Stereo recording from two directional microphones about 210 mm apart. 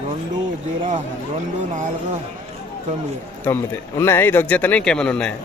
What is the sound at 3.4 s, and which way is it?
Speech, 10° left (ahead or behind).